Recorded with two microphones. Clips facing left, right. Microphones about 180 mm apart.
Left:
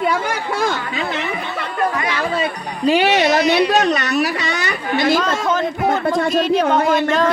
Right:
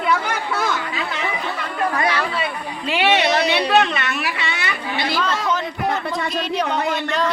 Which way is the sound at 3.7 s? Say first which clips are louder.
Left 2 dB; 40° left (ahead or behind).